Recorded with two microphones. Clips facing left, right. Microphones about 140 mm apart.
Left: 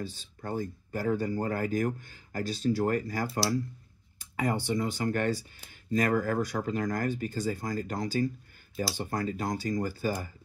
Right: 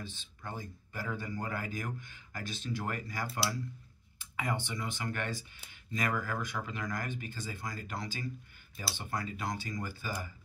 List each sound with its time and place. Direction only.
0.0 s speech: 40° left (ahead or behind)
4.2 s a sound: 40° left (ahead or behind)
4.6 s speech: 40° left (ahead or behind)